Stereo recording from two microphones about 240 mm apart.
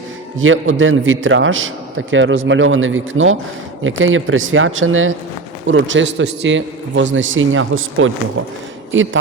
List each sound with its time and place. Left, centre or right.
0.3 s a man's voice: right